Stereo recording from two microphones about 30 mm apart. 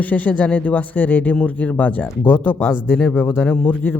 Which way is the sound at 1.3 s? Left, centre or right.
Left.